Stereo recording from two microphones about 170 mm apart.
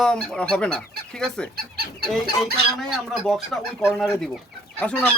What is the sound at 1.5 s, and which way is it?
Speech, 65° right (ahead or behind).